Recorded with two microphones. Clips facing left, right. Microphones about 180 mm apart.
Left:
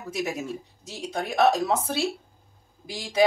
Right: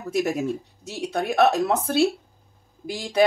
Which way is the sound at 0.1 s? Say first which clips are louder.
Right 6 dB; 60° right (ahead or behind).